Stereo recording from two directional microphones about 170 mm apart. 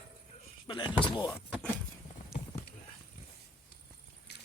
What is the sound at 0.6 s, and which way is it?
Door, 30° left (ahead or behind).